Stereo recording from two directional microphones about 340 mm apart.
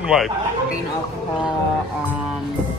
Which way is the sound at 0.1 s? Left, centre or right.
Centre.